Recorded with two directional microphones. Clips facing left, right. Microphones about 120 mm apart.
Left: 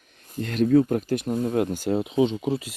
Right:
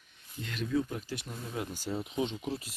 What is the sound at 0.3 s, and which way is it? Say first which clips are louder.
Speech: left 14 dB; 55° left (ahead or behind).